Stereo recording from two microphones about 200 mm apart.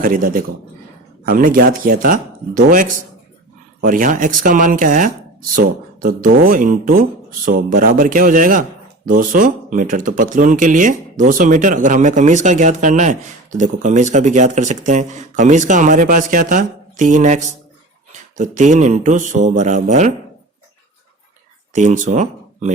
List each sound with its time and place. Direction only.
0.0 s speech: 45° right (ahead or behind)
21.7 s speech: 40° right (ahead or behind)